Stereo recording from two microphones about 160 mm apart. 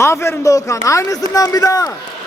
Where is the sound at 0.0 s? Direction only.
15° left (ahead or behind).